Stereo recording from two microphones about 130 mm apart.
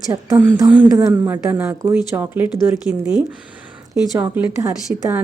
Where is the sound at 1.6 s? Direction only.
25° right (ahead or behind).